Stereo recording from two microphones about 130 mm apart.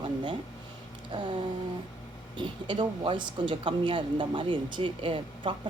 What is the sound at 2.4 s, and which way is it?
Speech, 35° right (ahead or behind).